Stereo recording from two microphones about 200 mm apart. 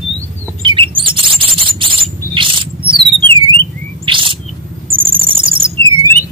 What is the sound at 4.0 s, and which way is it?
Chirp, 25° right (ahead or behind).